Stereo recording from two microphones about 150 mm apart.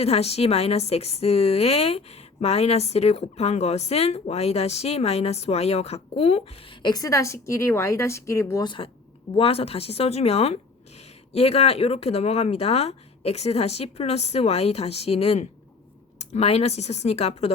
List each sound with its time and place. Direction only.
0.0 s a woman's voice: 45° left (ahead or behind)
6.8 s a woman's voice: 25° left (ahead or behind)
8.6 s a woman's voice: 35° left (ahead or behind)